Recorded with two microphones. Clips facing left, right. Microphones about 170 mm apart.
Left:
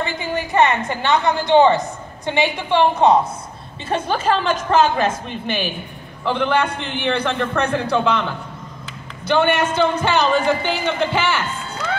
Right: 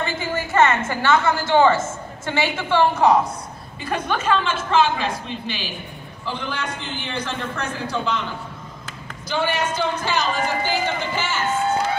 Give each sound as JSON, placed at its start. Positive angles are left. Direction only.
{"t": 0.0, "sound": "a woman's voice", "side_deg": 15}
{"t": 3.8, "sound": "a man's voice", "side_deg": 30}
{"t": 6.2, "sound": "a man's voice", "side_deg": 65}
{"t": 9.3, "sound": "a man's voice", "side_deg": 60}